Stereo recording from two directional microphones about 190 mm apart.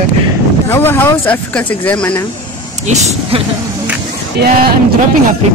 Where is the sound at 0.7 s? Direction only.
10° left (ahead or behind).